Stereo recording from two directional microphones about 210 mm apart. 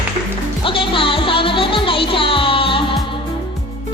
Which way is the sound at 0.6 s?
25° left (ahead or behind).